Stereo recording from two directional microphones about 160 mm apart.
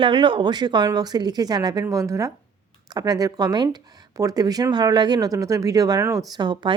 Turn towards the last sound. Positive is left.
turn(degrees=-30)  # may be behind; listen again after turning